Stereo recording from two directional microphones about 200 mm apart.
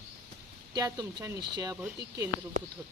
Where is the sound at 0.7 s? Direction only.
20° right (ahead or behind).